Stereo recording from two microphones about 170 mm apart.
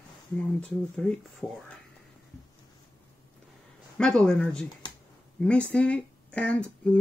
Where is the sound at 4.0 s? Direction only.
5° left (ahead or behind).